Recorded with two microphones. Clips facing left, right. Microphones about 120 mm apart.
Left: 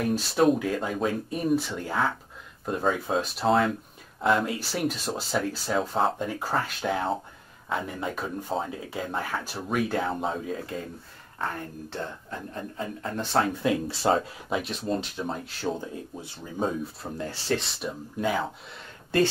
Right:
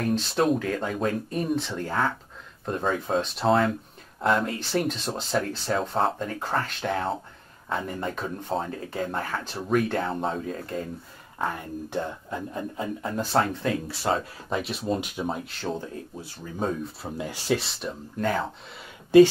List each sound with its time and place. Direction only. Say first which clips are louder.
0.0 s speech: left 2 dB; 5° left (ahead or behind)
11.3 s speech: right 3 dB; 15° right (ahead or behind)
13.5 s speech: left 2 dB; 15° left (ahead or behind)
14.0 s speech: left 3 dB; 25° left (ahead or behind)
14.5 s speech: right 1 dB; 5° right (ahead or behind)
17.2 s speech: right 2 dB; 10° right (ahead or behind)
17.8 s speech: right 1 dB; 5° left (ahead or behind)